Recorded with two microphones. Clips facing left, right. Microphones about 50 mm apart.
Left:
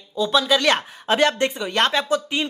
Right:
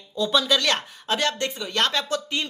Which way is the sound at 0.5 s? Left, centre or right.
Left.